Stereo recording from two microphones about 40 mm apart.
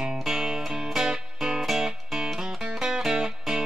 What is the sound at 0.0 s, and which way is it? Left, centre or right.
Music, centre.